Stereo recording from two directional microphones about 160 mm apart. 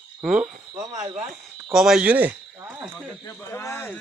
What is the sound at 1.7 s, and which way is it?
Speech, 5° right (ahead or behind).